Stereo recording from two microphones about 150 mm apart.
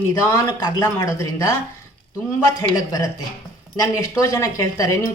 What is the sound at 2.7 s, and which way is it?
A woman's voice, 25° left (ahead or behind).